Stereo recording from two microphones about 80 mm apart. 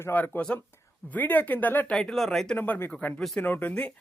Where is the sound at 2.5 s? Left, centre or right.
Left.